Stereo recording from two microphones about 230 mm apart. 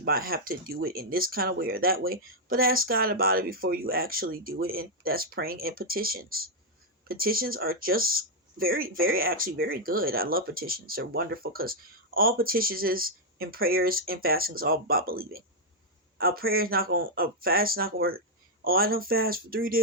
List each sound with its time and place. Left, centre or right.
0.0 s speech: right